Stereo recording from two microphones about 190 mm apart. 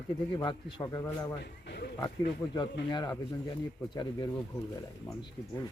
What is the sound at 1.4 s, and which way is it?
Speech, 60° left (ahead or behind).